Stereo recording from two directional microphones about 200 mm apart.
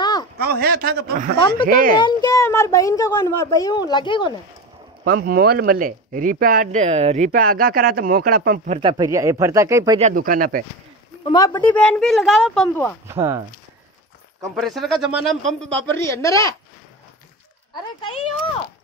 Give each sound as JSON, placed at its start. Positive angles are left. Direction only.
{"t": 0.0, "sound": "a sound", "side_deg": 20}
{"t": 0.4, "sound": "speech", "side_deg": -50}
{"t": 2.0, "sound": "a child's voice", "side_deg": 20}
{"t": 5.0, "sound": "speech", "side_deg": -50}
{"t": 7.2, "sound": "speech", "side_deg": -45}
{"t": 8.9, "sound": "speech", "side_deg": -15}
{"t": 9.9, "sound": "speech", "side_deg": -40}
{"t": 11.3, "sound": "a man's voice", "side_deg": 15}
{"t": 13.1, "sound": "speech", "side_deg": -15}
{"t": 14.4, "sound": "a man's voice", "side_deg": 0}
{"t": 16.0, "sound": "a child's voice", "side_deg": 15}
{"t": 17.7, "sound": "speech", "side_deg": 25}